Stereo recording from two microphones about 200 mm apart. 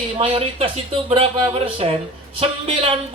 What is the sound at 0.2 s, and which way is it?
Speech, 30° right (ahead or behind).